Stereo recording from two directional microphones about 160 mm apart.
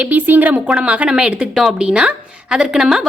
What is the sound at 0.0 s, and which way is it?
A woman's voice, 10° right (ahead or behind).